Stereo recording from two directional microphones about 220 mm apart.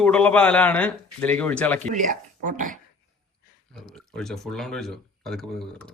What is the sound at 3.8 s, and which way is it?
Speech, centre (ahead or behind).